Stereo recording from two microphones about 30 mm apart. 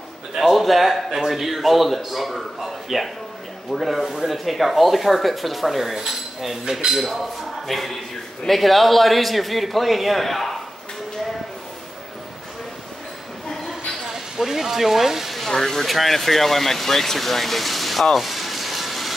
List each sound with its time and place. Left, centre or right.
0.4 s a man's voice: centre
5.9 s cutlery: centre
6.6 s cutlery: centre
7.6 s a man's voice: centre
14.0 s speech: centre
15.4 s speech: centre
18.1 s a sound: centre